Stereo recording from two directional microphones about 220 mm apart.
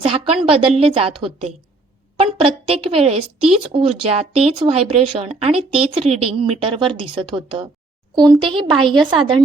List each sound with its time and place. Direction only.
0.0 s a woman's voice: 25° right (ahead or behind)